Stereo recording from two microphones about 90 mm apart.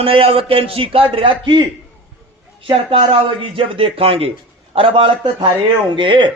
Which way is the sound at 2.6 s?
90° right.